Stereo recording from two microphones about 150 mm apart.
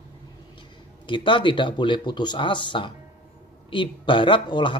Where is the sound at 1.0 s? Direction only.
35° left (ahead or behind).